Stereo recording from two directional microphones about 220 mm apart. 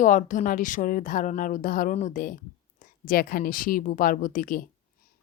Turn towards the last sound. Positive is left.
turn(degrees=40)  # may be behind; listen again after turning